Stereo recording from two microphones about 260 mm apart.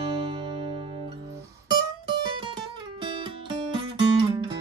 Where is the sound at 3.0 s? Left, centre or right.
Centre.